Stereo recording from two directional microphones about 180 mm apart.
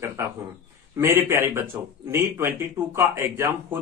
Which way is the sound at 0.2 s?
15° right (ahead or behind).